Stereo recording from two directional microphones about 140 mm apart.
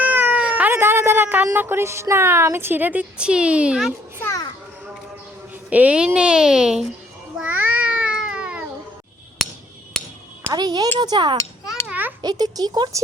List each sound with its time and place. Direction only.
0.0 s cat: 15° right (ahead or behind)
1.5 s speech: 15° right (ahead or behind)
4.2 s children playing: 20° left (ahead or behind)
5.7 s speech: 10° right (ahead or behind)
7.3 s cat: 10° right (ahead or behind)
10.5 s speech: 30° right (ahead or behind)
11.0 s a sound: 30° right (ahead or behind)
11.9 s a sound: 10° right (ahead or behind)
12.2 s speech: 25° right (ahead or behind)